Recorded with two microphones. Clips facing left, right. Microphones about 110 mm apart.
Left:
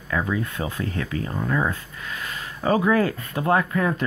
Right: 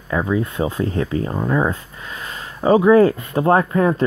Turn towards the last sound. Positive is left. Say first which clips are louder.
# right 6 dB
turn(degrees=-35)  # may be behind; listen again after turning